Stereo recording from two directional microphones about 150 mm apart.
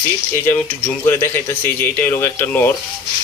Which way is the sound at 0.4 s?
15° left (ahead or behind).